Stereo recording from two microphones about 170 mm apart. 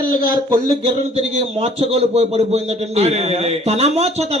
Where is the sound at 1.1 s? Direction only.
40° right (ahead or behind).